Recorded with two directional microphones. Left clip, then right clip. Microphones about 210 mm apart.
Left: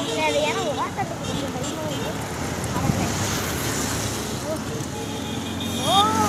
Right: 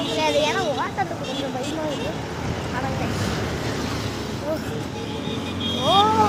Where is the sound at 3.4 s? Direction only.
50° left (ahead or behind).